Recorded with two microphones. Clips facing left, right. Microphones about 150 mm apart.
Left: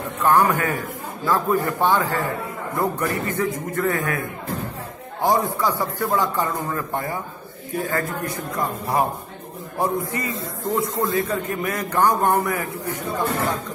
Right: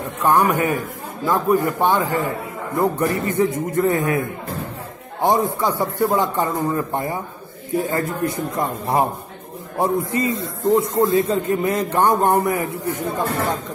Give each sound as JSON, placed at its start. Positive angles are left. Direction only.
{"t": 0.2, "sound": "a man's voice", "side_deg": -15}